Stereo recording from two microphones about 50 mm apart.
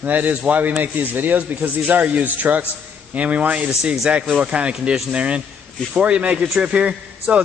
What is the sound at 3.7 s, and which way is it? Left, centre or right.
A man's voice, centre.